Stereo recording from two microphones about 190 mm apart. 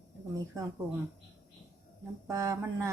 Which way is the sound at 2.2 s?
15° right (ahead or behind).